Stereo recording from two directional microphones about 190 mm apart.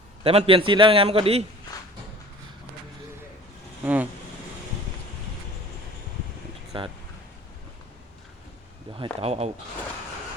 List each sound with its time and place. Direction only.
0.2 s a man's voice: 30° right (ahead or behind)
3.8 s speech: 10° right (ahead or behind)
6.7 s speech: 30° right (ahead or behind)
8.9 s a sound: 25° right (ahead or behind)
9.2 s speech: 35° right (ahead or behind)